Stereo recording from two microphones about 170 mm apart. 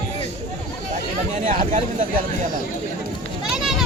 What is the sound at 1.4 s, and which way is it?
Speech, 50° right (ahead or behind).